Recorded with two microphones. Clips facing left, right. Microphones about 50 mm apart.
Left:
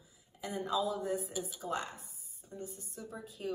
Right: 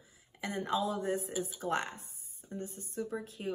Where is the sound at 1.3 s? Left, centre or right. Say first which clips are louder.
Right 3 dB; centre.